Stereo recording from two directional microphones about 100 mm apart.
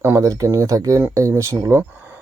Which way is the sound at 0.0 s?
30° right (ahead or behind).